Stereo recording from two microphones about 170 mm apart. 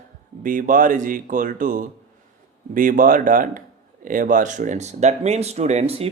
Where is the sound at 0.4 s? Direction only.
50° right (ahead or behind).